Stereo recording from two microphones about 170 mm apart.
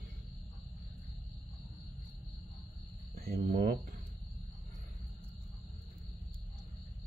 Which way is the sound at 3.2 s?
60° right (ahead or behind).